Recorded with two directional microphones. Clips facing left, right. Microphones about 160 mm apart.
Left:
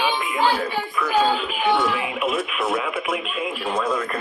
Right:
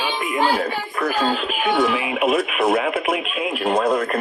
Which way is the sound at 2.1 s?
80° right.